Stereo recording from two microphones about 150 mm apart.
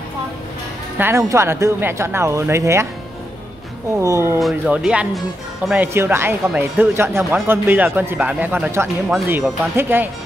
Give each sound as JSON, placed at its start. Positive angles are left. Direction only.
{"t": 0.9, "sound": "speech", "side_deg": -15}
{"t": 4.0, "sound": "speech", "side_deg": -20}
{"t": 4.4, "sound": "speech", "side_deg": -5}